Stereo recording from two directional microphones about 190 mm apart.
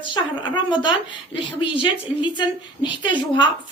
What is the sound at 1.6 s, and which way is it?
Speech, 25° left (ahead or behind).